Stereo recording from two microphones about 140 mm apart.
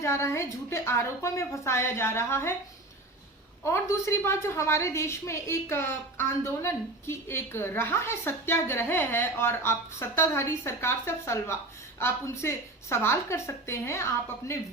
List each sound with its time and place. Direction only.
0.0 s a woman's voice: 20° left (ahead or behind)
3.6 s a woman's voice: 20° left (ahead or behind)